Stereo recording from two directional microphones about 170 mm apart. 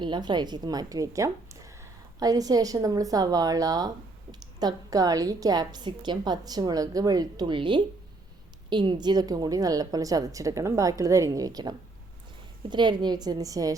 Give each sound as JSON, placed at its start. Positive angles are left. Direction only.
{"t": 0.0, "sound": "a woman's voice", "side_deg": -25}